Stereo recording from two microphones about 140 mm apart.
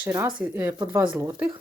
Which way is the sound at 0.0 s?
15° right (ahead or behind).